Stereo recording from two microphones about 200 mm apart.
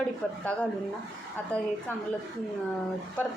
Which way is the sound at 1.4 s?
10° left (ahead or behind).